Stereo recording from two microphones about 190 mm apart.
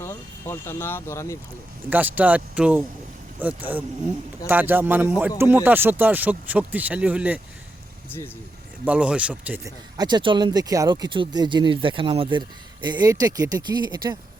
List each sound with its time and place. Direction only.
0.0 s speech: 15° left (ahead or behind)
1.9 s speech: 10° right (ahead or behind)
8.8 s speech: 5° right (ahead or behind)
10.0 s speech: 25° right (ahead or behind)